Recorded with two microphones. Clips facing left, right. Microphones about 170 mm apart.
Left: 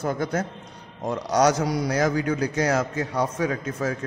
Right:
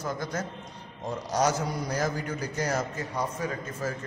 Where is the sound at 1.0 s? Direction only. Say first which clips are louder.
Left 6 dB; 70° left (ahead or behind).